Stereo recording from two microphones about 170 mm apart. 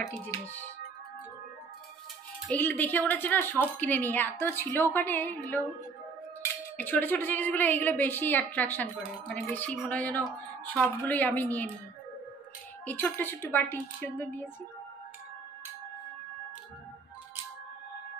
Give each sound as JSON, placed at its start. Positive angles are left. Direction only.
{"t": 0.2, "sound": "speech", "side_deg": 10}
{"t": 2.5, "sound": "speech", "side_deg": 10}
{"t": 12.8, "sound": "speech", "side_deg": 10}